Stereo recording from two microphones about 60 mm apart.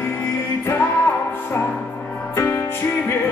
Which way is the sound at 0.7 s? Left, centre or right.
Left.